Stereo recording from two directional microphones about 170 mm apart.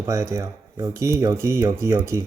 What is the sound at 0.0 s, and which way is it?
Speech, 15° right (ahead or behind).